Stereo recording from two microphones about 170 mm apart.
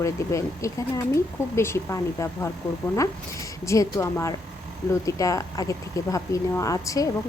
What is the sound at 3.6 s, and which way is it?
Speech, 15° left (ahead or behind).